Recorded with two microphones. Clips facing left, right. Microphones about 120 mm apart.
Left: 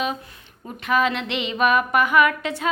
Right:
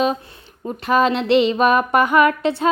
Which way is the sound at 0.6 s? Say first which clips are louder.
Right 4 dB; 35° right (ahead or behind).